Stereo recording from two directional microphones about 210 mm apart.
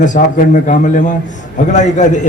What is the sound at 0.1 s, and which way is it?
A man's voice, 40° left (ahead or behind).